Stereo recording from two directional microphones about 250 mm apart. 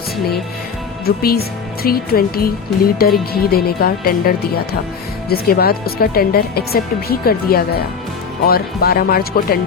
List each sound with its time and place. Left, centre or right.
1.0 s speech: left